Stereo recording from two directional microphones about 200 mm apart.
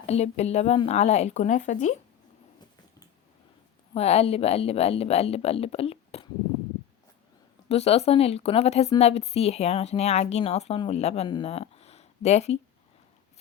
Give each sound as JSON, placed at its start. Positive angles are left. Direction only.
{"t": 0.0, "sound": "a woman's voice", "side_deg": 35}
{"t": 3.9, "sound": "a woman's voice", "side_deg": 30}
{"t": 7.7, "sound": "a woman's voice", "side_deg": 30}